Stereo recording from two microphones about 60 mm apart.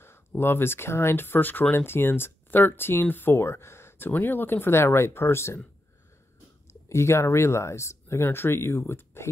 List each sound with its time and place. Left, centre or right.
0.4 s speech: left
4.1 s speech: left
6.9 s speech: left